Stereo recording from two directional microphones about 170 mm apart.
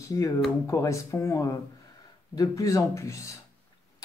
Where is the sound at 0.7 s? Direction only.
20° left (ahead or behind).